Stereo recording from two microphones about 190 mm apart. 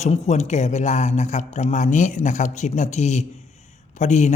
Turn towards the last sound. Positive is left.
turn(degrees=40)  # may be behind; listen again after turning